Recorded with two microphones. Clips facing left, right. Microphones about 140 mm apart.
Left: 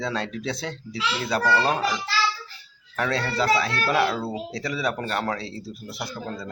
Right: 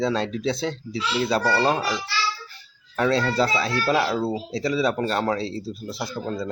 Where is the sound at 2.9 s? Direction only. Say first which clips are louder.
Right 4 dB; 30° right (ahead or behind).